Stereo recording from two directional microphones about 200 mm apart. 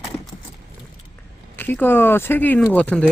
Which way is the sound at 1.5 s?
10° left (ahead or behind).